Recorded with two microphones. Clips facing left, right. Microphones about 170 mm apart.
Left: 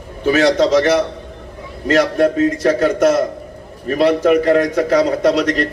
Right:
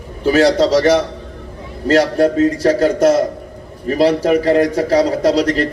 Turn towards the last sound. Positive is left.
turn(degrees=-35)  # may be behind; listen again after turning